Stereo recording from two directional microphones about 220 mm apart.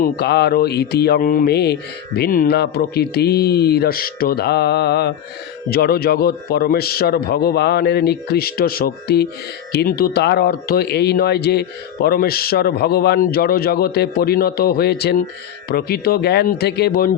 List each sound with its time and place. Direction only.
0.0 s speech: 45° left (ahead or behind)